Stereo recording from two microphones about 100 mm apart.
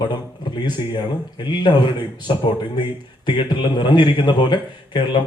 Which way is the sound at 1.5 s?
50° left (ahead or behind).